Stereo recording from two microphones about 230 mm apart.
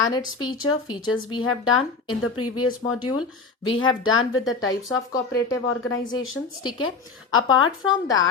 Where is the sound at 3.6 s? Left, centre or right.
Left.